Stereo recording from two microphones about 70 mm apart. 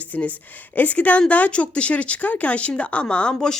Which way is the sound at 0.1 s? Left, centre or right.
Left.